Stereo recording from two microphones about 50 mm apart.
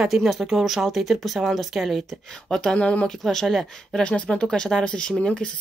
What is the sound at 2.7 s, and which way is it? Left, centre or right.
Speech, left.